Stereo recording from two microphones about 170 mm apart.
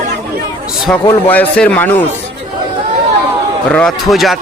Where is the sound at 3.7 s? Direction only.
Centre (ahead or behind).